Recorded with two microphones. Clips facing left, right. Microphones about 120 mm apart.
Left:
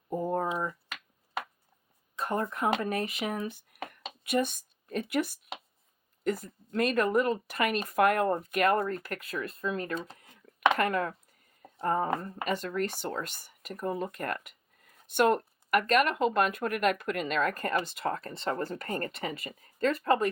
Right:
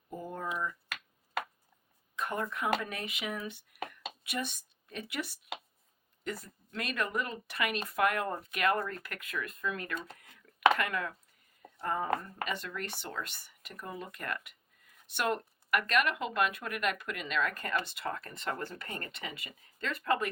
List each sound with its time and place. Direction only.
0.1 s a sound: 45° left (ahead or behind)
2.1 s speech: 35° left (ahead or behind)
6.7 s speech: 40° left (ahead or behind)